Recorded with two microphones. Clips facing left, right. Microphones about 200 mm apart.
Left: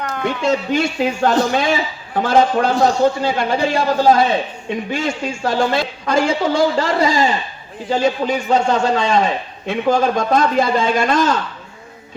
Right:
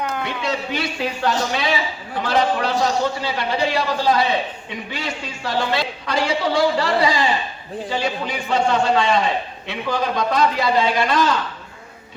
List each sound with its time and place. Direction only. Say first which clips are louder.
0.4 s a woman's voice: left 9 dB; 45° left (ahead or behind)